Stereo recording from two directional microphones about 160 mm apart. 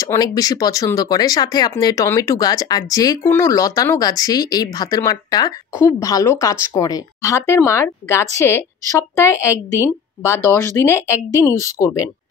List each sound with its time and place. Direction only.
0.0 s a woman's voice: 25° left (ahead or behind)